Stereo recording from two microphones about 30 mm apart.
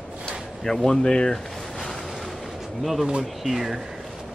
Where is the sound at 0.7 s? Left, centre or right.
Left.